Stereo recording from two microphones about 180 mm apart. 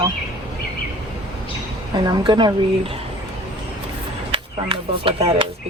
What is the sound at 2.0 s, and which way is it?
Speech, 25° right (ahead or behind).